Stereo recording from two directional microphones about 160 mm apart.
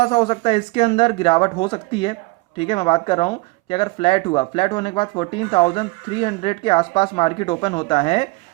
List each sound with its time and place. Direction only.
0.0 s speech: 35° left (ahead or behind)